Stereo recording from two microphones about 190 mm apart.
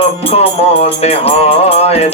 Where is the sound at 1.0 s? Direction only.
30° left (ahead or behind).